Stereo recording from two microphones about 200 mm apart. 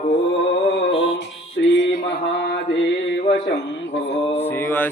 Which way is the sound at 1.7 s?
65° left (ahead or behind).